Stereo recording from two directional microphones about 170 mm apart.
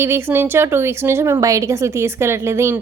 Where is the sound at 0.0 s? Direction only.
15° right (ahead or behind).